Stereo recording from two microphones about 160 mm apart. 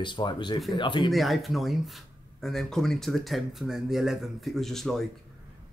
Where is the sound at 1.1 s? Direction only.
Centre (ahead or behind).